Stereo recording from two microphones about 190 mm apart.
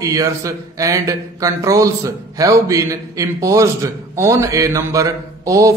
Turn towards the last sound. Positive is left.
turn(degrees=-15)  # may be behind; listen again after turning